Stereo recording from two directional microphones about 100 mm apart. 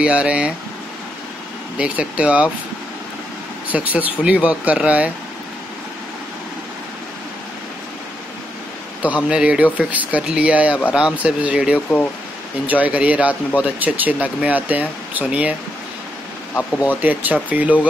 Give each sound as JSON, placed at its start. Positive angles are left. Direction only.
{"t": 0.0, "sound": "speech", "side_deg": -10}
{"t": 1.8, "sound": "speech", "side_deg": -15}
{"t": 3.6, "sound": "speech", "side_deg": -15}
{"t": 9.0, "sound": "speech", "side_deg": -15}
{"t": 17.0, "sound": "speech", "side_deg": -15}